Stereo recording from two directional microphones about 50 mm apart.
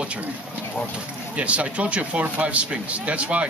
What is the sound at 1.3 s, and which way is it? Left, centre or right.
Speech, right.